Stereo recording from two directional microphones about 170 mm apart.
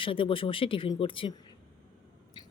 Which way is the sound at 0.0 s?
30° left (ahead or behind).